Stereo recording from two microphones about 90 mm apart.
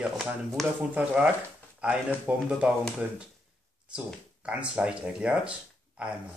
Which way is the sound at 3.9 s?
10° right (ahead or behind).